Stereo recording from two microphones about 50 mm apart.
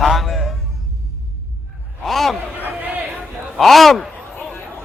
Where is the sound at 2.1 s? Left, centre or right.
Centre.